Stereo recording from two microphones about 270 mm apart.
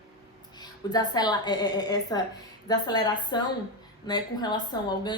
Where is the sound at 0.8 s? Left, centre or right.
Centre.